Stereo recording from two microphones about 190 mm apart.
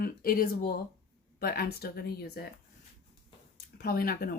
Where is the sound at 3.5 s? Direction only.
50° left (ahead or behind).